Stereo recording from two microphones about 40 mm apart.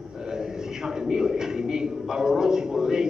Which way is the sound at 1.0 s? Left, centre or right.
Centre.